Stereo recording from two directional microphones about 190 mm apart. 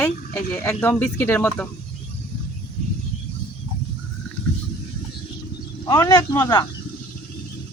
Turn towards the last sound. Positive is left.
turn(degrees=20)  # may be behind; listen again after turning